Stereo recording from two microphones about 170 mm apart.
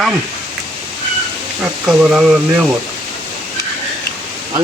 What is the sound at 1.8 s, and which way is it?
Speech, 5° right (ahead or behind).